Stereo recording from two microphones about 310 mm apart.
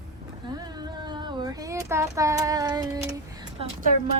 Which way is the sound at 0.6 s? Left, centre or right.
Centre.